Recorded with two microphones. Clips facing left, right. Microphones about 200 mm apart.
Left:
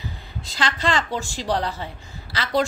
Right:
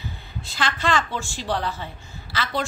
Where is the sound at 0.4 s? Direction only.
35° left (ahead or behind).